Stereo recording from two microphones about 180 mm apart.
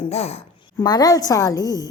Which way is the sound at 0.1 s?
35° left (ahead or behind).